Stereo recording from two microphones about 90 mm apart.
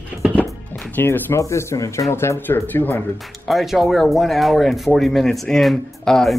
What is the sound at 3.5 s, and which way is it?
Speech, centre (ahead or behind).